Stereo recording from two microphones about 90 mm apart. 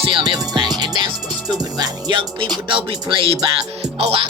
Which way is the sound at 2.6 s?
70° right (ahead or behind).